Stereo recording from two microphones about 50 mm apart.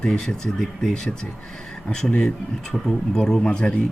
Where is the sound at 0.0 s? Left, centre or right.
Centre.